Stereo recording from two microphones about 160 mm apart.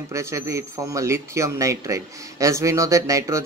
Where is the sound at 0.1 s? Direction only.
20° right (ahead or behind).